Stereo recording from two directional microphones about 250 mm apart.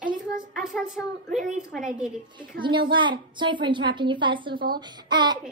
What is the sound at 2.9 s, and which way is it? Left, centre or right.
A woman's voice, centre.